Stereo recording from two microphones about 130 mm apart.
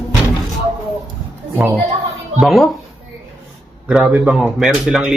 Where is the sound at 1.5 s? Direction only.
15° right (ahead or behind).